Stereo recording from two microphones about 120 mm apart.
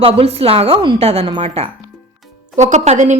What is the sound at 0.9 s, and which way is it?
Speech, 60° right (ahead or behind).